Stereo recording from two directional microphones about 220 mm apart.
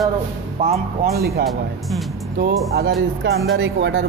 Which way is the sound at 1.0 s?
45° right (ahead or behind).